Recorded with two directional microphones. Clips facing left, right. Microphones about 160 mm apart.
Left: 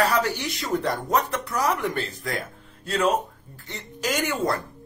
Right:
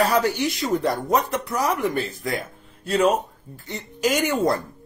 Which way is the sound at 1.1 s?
15° right (ahead or behind).